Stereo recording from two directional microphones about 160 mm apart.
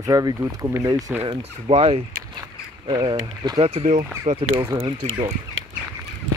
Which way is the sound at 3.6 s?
45° right (ahead or behind).